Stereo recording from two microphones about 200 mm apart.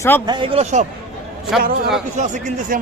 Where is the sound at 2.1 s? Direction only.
40° right (ahead or behind).